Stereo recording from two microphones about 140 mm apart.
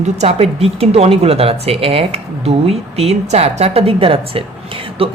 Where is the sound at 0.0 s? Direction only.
50° right (ahead or behind).